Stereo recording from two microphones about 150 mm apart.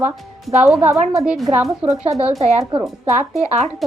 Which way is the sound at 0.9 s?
50° right (ahead or behind).